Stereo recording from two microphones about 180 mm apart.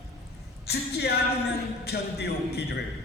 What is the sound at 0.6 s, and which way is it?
A man's voice, 65° left (ahead or behind).